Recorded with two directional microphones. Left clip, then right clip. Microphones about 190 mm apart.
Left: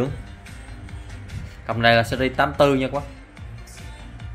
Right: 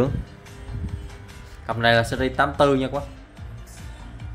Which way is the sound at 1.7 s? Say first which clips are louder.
Left 2 dB; 5° left (ahead or behind).